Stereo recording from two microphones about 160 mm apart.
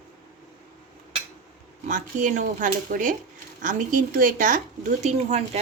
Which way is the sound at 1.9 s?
50° right (ahead or behind).